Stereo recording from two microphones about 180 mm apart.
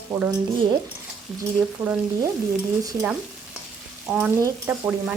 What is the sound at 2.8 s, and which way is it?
Speech, 20° right (ahead or behind).